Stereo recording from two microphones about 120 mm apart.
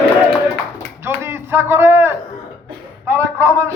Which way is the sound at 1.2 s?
20° right (ahead or behind).